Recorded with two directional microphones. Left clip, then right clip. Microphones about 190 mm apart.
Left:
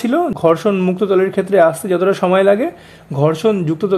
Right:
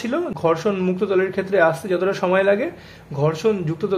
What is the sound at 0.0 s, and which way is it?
Speech, 40° left (ahead or behind).